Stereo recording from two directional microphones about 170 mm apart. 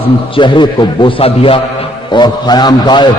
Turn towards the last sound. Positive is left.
turn(degrees=25)  # may be behind; listen again after turning